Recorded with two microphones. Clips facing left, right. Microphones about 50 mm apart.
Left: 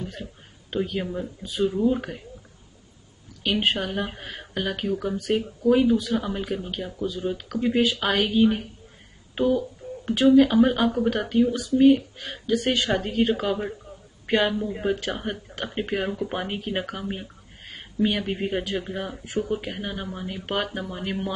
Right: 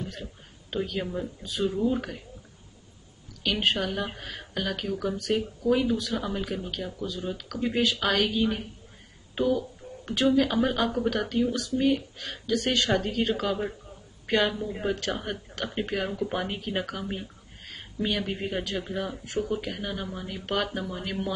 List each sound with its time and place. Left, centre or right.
0.0 s speech: centre
3.4 s speech: centre
9.3 s a sound: centre
10.3 s speech: centre